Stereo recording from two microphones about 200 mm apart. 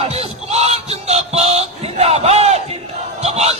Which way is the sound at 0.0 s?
30° right (ahead or behind).